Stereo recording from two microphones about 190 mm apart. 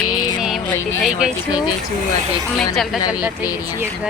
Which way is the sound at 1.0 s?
5° right (ahead or behind).